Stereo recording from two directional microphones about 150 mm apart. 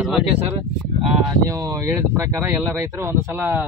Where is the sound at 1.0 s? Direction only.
25° right (ahead or behind).